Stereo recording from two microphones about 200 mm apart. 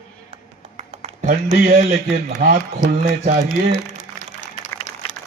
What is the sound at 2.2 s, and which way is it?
Speech, 40° right (ahead or behind).